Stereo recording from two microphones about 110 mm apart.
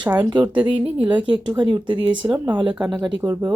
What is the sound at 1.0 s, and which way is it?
Speech, 45° right (ahead or behind).